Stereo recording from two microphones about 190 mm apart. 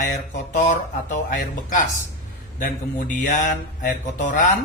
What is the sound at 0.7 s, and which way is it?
Speech, 40° left (ahead or behind).